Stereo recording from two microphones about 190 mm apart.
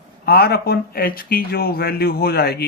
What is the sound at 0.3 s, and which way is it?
Speech, 55° left (ahead or behind).